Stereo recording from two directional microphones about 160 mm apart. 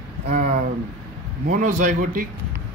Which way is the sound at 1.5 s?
55° right (ahead or behind).